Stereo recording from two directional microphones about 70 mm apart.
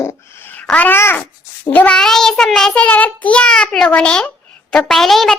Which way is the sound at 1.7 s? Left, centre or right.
Left.